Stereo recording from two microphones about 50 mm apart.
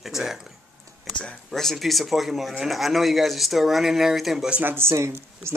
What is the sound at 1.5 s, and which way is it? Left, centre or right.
Speech, centre.